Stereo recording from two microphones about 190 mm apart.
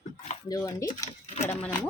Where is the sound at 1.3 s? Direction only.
35° left (ahead or behind).